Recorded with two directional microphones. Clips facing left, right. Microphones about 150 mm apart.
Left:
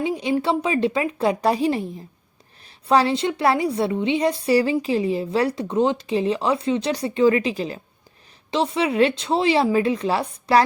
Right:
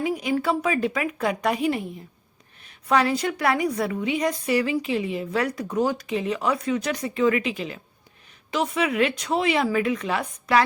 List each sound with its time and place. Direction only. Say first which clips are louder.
0.0 s a woman's voice: left 2 dB; 25° left (ahead or behind)